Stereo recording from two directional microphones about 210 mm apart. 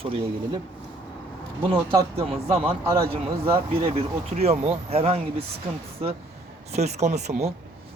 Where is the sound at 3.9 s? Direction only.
30° right (ahead or behind).